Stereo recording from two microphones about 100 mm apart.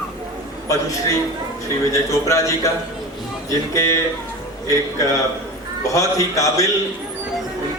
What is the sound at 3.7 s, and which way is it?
A man's voice, 30° left (ahead or behind).